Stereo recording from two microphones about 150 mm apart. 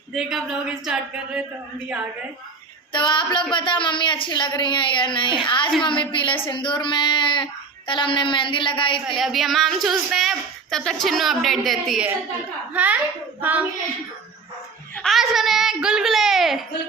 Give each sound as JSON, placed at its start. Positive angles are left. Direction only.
{"t": 0.1, "sound": "a woman's voice", "side_deg": -5}
{"t": 2.9, "sound": "speech", "side_deg": 30}
{"t": 9.0, "sound": "a woman's voice", "side_deg": 0}
{"t": 12.7, "sound": "a child's voice", "side_deg": -10}
{"t": 14.9, "sound": "a woman's voice", "side_deg": 0}